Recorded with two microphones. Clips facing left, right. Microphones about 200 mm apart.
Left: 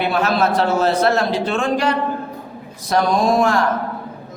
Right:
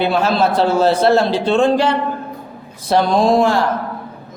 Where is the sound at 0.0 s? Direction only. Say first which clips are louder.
Right 2 dB; 30° right (ahead or behind).